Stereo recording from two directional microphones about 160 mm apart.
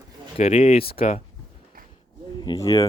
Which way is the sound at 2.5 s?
30° left (ahead or behind).